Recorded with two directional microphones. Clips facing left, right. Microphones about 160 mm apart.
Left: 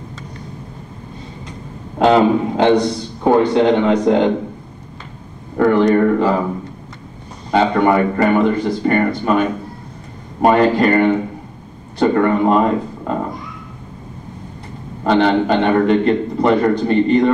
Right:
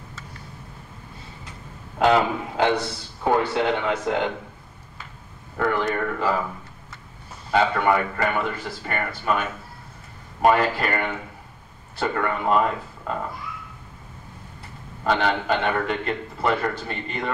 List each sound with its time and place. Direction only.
2.0 s a man's voice: 25° left (ahead or behind)
5.6 s a man's voice: 20° left (ahead or behind)
7.5 s a man's voice: 20° left (ahead or behind)
15.0 s a man's voice: 25° left (ahead or behind)